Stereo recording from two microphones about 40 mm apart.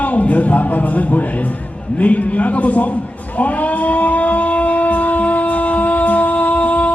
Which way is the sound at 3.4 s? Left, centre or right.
Left.